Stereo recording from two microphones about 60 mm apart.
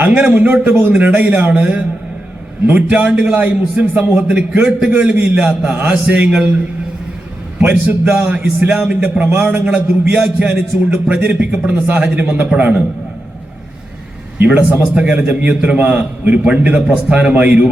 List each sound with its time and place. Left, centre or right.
0.0 s a man's voice: right
7.6 s a man's voice: right
14.4 s a man's voice: right